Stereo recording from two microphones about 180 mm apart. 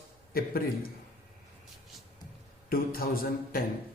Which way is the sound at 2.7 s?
55° left (ahead or behind).